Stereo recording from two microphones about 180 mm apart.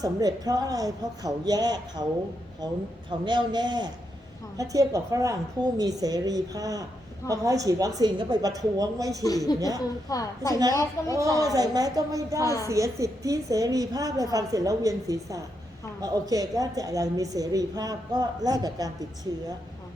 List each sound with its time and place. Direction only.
0.0 s a woman's voice: 20° right (ahead or behind)
3.1 s a woman's voice: 25° right (ahead or behind)
10.1 s a woman's voice: 20° left (ahead or behind)
11.5 s a woman's voice: 20° right (ahead or behind)
12.4 s a woman's voice: 20° left (ahead or behind)
12.6 s a woman's voice: 15° right (ahead or behind)